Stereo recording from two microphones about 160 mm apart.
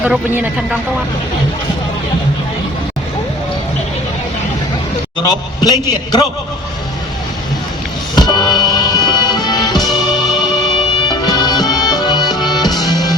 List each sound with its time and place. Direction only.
0.0 s speech: 10° right (ahead or behind)
5.2 s a man's voice: 25° left (ahead or behind)
8.1 s music: 25° left (ahead or behind)